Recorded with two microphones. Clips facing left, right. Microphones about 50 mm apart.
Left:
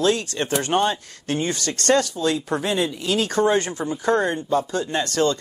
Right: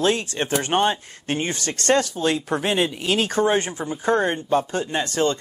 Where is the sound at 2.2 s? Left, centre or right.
Right.